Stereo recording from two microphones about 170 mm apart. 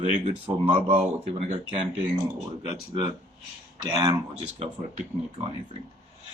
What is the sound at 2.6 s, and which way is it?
Speech, 25° right (ahead or behind).